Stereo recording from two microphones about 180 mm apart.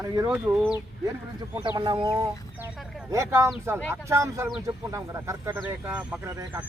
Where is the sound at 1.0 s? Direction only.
20° right (ahead or behind).